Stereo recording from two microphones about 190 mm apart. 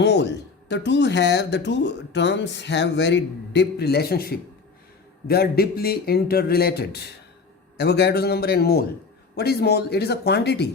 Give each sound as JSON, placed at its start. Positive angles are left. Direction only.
{"t": 0.0, "sound": "speech", "side_deg": 65}